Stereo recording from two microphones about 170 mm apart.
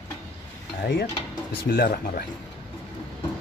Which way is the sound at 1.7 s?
65° left (ahead or behind).